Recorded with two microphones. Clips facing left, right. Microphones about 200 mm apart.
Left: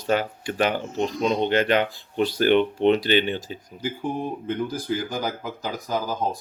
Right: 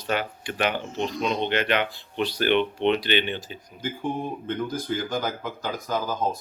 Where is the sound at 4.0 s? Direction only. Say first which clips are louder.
Even; 10° left (ahead or behind).